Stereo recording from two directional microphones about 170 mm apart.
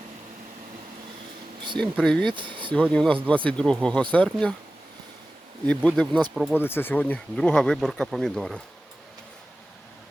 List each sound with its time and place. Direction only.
1.8 s speech: 5° left (ahead or behind)
2.2 s speech: 30° right (ahead or behind)
2.7 s speech: 5° left (ahead or behind)
5.6 s speech: 5° left (ahead or behind)
6.3 s speech: 10° right (ahead or behind)
6.6 s speech: 15° left (ahead or behind)